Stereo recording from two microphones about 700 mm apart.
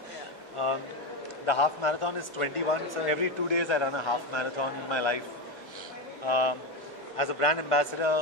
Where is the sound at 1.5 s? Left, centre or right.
Left.